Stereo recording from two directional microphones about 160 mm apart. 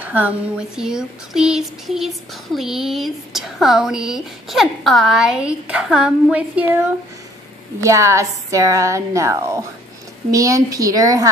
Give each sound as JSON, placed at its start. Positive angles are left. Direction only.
{"t": 0.0, "sound": "a woman's voice", "side_deg": -10}
{"t": 7.8, "sound": "a woman's voice", "side_deg": -20}